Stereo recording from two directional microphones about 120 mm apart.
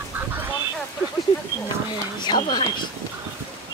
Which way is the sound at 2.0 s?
40° left (ahead or behind).